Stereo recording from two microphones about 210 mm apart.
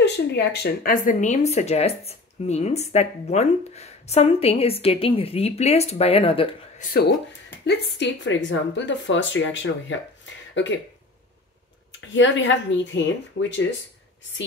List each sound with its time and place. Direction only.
0.0 s speech: 55° left (ahead or behind); by 6.5 s 25° left (ahead or behind)
6.8 s speech: 45° left (ahead or behind); by 9.9 s 60° left (ahead or behind)
11.9 s speech: 60° left (ahead or behind)